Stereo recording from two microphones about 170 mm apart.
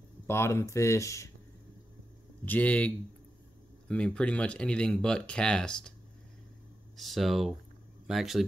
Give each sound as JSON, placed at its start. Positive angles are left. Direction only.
{"t": 0.3, "sound": "speech", "side_deg": 15}
{"t": 2.4, "sound": "speech", "side_deg": 10}
{"t": 7.0, "sound": "speech", "side_deg": 0}